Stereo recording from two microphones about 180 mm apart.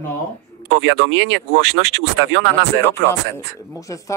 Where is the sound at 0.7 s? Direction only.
90° right.